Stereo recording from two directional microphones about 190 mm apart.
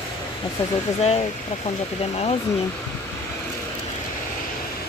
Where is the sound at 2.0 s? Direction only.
30° left (ahead or behind).